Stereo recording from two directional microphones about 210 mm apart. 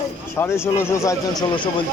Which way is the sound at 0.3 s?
10° left (ahead or behind).